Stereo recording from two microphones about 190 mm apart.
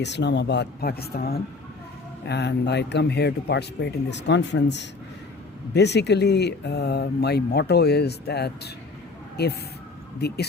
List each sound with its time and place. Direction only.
0.0 s speech: 65° left (ahead or behind)
2.2 s speech: 60° left (ahead or behind)